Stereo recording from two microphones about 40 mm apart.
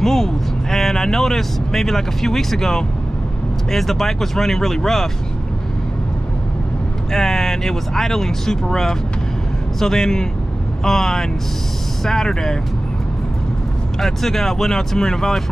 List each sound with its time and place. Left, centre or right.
0.0 s speech: centre
7.1 s speech: centre
13.9 s speech: centre